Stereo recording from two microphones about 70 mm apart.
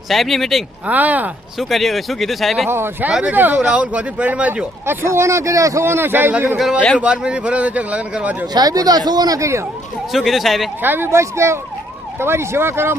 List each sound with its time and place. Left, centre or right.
0.1 s speech: centre
0.9 s speech: right
1.5 s speech: centre
2.6 s speech: right
3.1 s a man's voice: centre
3.3 s speech: right
3.6 s a man's voice: centre
4.9 s speech: right
5.8 s speech: right
6.6 s a man's voice: centre
8.5 s speech: right
9.4 s speech: right
10.1 s speech: centre
10.8 s speech: right